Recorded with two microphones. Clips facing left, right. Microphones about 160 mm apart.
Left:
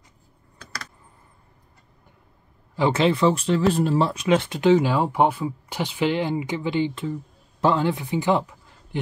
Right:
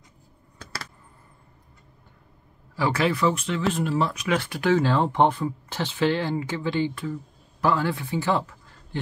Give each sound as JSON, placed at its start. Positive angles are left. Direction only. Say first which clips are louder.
{"t": 2.7, "sound": "speech", "louder": "left 4 dB", "side_deg": 20}